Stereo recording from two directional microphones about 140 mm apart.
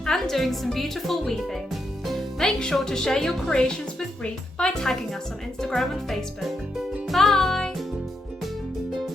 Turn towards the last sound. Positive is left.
turn(degrees=0)  # may be behind; listen again after turning